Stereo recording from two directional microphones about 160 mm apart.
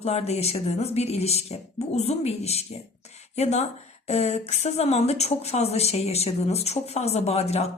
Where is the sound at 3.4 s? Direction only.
45° left (ahead or behind).